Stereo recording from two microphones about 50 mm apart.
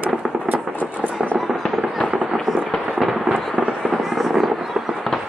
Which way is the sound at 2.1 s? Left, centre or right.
Centre.